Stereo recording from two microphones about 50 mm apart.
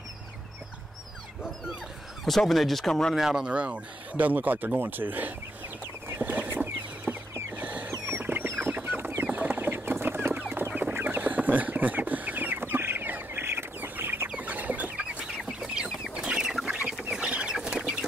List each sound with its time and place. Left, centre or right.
2.2 s speech: centre
3.2 s speech: centre
3.5 s speech: right
6.0 s chicken: right
7.5 s mechanisms: right
8.1 s chicken: right
8.5 s chicken: right
8.7 s chicken: right
10.7 s chicken: right
13.7 s chicken: right
14.4 s chicken: right
15.0 s chicken: centre